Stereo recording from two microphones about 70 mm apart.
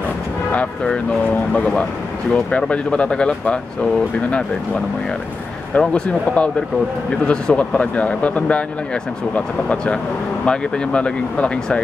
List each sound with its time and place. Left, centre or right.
0.5 s speech: centre
5.8 s speech: centre